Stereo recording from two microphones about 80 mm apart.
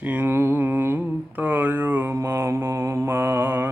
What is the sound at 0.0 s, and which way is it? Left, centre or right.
Mantra, right.